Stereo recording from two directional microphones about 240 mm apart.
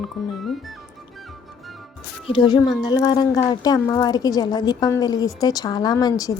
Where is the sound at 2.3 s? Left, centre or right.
Centre.